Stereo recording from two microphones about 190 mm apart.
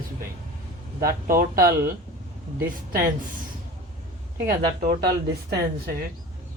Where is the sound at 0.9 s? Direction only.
50° right (ahead or behind).